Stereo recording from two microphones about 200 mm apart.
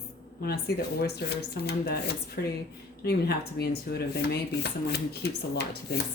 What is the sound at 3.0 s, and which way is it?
Speech, 55° left (ahead or behind).